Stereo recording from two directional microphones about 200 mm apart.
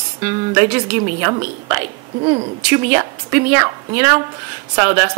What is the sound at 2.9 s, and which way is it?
Speech, 10° right (ahead or behind).